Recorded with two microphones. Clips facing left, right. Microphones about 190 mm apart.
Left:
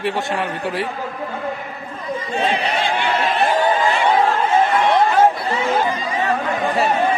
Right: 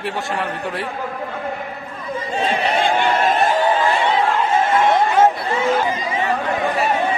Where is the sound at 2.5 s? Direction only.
50° right (ahead or behind).